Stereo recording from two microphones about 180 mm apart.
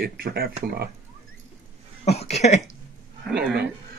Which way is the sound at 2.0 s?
35° left (ahead or behind).